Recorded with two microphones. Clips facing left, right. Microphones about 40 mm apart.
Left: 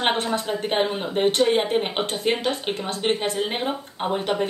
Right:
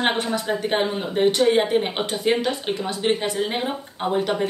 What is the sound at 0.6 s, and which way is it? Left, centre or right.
Speech, centre.